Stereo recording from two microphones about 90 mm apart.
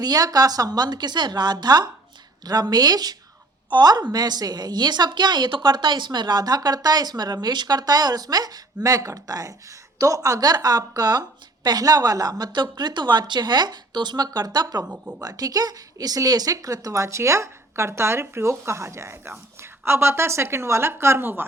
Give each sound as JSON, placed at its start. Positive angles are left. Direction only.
{"t": 0.0, "sound": "speech", "side_deg": -45}